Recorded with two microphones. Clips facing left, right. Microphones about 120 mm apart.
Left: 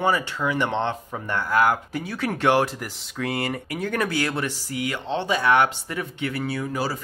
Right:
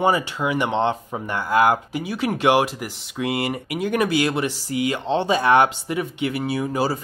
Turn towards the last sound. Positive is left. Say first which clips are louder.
# right 4 dB
turn(degrees=-20)  # may be behind; listen again after turning